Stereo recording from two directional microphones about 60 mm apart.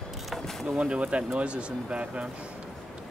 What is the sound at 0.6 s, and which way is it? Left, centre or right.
Speech, centre.